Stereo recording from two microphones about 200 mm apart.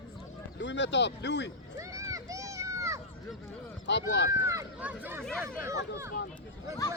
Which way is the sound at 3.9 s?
60° left (ahead or behind).